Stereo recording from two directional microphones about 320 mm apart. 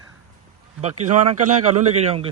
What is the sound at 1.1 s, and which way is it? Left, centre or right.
A man's voice, right.